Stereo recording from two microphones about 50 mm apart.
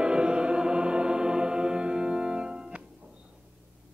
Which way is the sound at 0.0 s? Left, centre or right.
Centre.